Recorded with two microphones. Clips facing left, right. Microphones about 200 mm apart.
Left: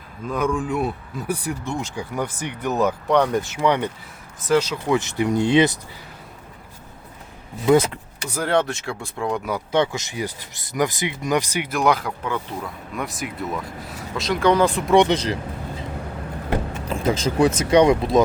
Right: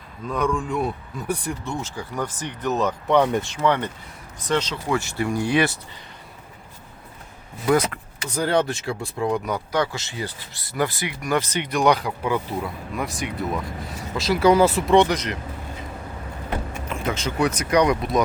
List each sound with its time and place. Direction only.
0.3 s speech: 5° left (ahead or behind)
3.1 s speech: centre (ahead or behind)
3.6 s speech: 10° left (ahead or behind)
7.6 s speech: 25° left (ahead or behind)
8.4 s speech: centre (ahead or behind)
9.7 s speech: 20° left (ahead or behind); by 14.9 s 5° right (ahead or behind)
14.9 s speech: 25° left (ahead or behind)
16.9 s speech: 35° left (ahead or behind)